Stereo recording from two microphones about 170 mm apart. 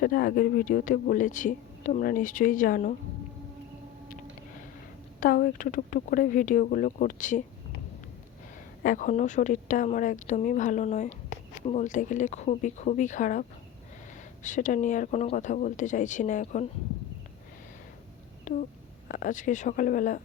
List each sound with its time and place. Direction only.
0.0 s speech: 60° left (ahead or behind)
5.2 s speech: 55° left (ahead or behind)
8.8 s speech: 50° left (ahead or behind)
14.4 s speech: 50° left (ahead or behind)
18.5 s speech: 50° left (ahead or behind)